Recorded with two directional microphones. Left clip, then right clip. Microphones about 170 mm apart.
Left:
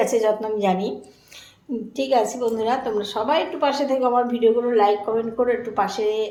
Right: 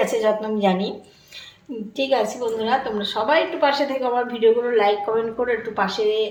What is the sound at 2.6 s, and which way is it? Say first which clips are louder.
A woman's voice: right 3 dB; 10° left (ahead or behind).